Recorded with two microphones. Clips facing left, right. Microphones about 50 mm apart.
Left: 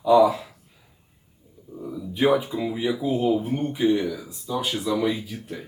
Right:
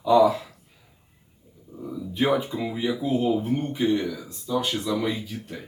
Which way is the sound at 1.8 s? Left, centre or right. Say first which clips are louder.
Left 3 dB; centre.